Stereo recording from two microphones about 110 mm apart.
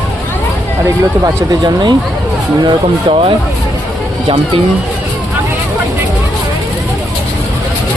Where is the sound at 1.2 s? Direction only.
40° right (ahead or behind).